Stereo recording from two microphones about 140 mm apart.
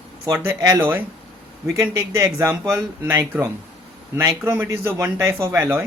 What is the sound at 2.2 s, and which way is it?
Speech, 20° right (ahead or behind).